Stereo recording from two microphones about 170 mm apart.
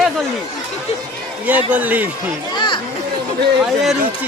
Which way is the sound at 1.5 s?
10° right (ahead or behind).